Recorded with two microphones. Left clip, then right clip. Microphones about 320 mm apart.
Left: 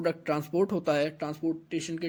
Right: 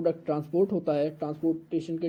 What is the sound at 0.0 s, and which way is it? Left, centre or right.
Speech, left.